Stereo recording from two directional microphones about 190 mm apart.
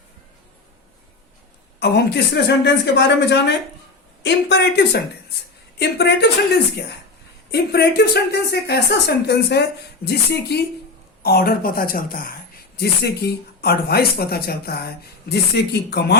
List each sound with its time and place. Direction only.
1.8 s speech: 60° left (ahead or behind)
7.5 s a woman's voice: 60° left (ahead or behind)